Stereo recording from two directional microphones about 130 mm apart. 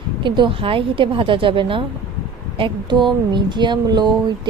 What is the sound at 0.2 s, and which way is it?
Speech, 40° right (ahead or behind).